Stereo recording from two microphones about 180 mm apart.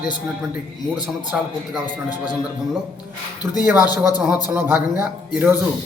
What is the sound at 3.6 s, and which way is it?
Speech, 10° right (ahead or behind).